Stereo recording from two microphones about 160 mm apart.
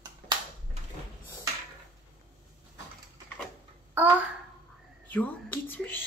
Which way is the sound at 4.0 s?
10° right (ahead or behind).